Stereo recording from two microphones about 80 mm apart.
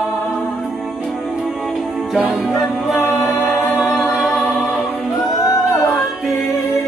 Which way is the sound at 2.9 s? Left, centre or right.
Centre.